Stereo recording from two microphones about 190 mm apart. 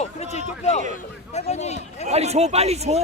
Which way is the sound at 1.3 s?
35° left (ahead or behind).